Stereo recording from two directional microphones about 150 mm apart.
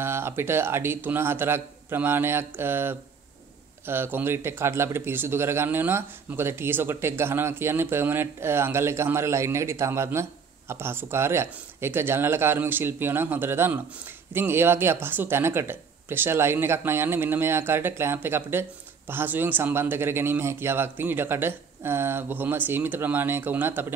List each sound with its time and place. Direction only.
0.0 s speech: 15° right (ahead or behind)